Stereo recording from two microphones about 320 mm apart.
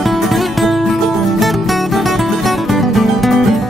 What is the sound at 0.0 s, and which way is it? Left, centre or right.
Music, centre.